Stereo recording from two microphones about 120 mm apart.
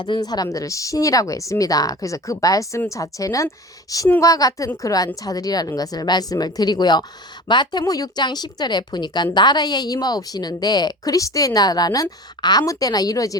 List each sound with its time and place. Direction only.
0.0 s speech: 35° left (ahead or behind)